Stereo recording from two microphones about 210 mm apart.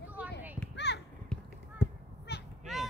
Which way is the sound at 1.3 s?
5° left (ahead or behind).